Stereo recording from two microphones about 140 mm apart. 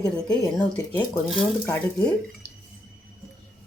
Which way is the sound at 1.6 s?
15° left (ahead or behind).